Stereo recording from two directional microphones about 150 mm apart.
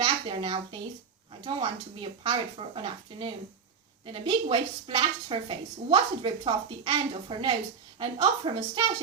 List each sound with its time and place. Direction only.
0.0 s a woman's voice: 35° right (ahead or behind)